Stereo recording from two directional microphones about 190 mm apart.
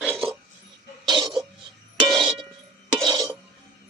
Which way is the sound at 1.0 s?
25° right (ahead or behind).